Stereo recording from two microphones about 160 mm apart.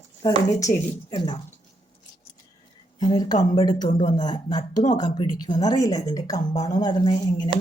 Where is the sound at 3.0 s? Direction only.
25° left (ahead or behind).